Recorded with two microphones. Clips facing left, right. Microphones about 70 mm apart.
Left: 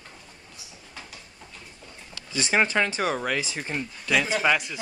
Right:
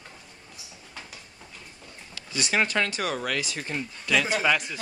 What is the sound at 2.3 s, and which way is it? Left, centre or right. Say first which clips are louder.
A man's voice: left 2 dB; left.